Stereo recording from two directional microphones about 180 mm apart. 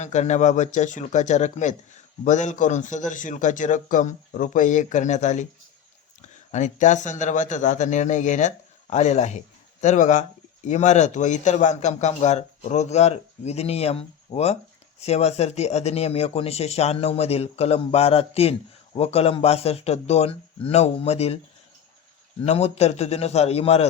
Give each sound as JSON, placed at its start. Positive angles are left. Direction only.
{"t": 0.0, "sound": "speech", "side_deg": 40}
{"t": 6.5, "sound": "speech", "side_deg": 40}
{"t": 22.4, "sound": "speech", "side_deg": 35}